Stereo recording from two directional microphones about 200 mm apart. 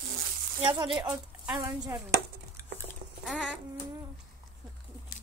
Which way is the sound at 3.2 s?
5° left (ahead or behind).